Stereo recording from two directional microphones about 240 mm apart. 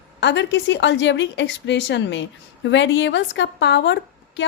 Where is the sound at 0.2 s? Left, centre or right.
Left.